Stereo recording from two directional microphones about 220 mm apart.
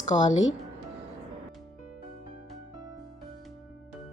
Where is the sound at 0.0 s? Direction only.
35° left (ahead or behind).